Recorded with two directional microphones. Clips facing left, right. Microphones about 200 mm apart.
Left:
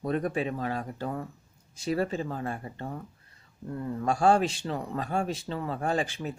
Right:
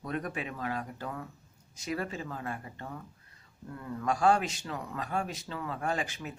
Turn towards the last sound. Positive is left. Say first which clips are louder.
# left 5 dB
turn(degrees=30)  # may be behind; listen again after turning